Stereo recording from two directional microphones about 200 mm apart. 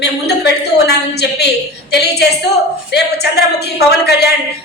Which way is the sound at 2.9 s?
55° left (ahead or behind).